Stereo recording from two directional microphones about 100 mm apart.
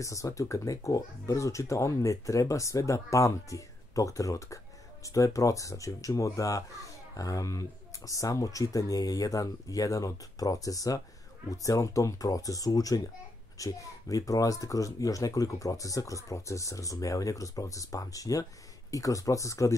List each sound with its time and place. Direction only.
0.0 s speech: 30° left (ahead or behind)